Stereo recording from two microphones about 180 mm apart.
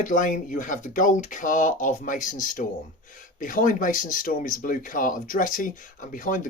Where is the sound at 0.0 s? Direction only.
45° left (ahead or behind).